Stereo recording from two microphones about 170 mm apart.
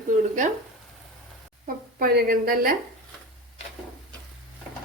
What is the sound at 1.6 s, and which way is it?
A woman's voice, 60° right (ahead or behind).